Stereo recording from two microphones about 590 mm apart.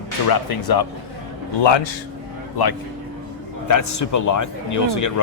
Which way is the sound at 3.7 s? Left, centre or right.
Left.